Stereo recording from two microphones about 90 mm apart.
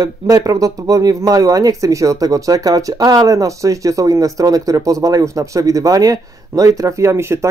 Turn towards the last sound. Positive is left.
turn(degrees=-30)  # may be behind; listen again after turning